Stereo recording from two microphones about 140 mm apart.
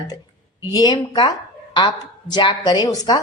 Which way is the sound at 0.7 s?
30° left (ahead or behind).